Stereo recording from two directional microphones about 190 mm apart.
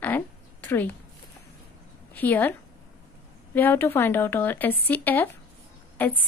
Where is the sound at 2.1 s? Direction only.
10° left (ahead or behind).